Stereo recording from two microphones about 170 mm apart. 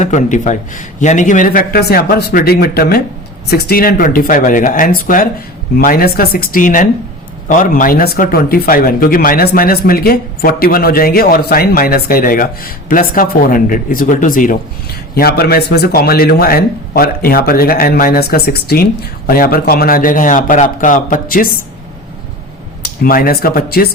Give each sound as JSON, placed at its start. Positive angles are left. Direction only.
{"t": 0.0, "sound": "speech", "side_deg": 45}
{"t": 15.1, "sound": "speech", "side_deg": 65}
{"t": 22.8, "sound": "speech", "side_deg": 55}